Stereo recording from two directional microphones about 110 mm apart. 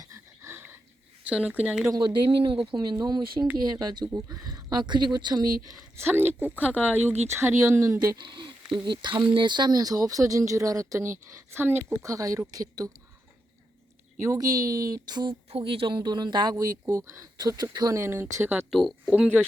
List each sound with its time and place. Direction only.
0.0 s dog: 25° right (ahead or behind)
1.3 s speech: 10° right (ahead or behind)
1.9 s speech: 45° right (ahead or behind)
6.0 s speech: 20° right (ahead or behind)
12.0 s speech: 30° right (ahead or behind)
14.2 s speech: 30° right (ahead or behind)
15.4 s speech: 60° right (ahead or behind)
16.0 s speech: 40° right (ahead or behind); by 18.3 s 25° right (ahead or behind)
18.7 s speech: centre (ahead or behind)